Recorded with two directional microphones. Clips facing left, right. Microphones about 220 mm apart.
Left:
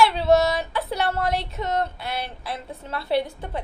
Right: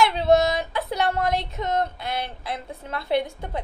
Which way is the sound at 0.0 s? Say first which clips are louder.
Even; 20° right (ahead or behind).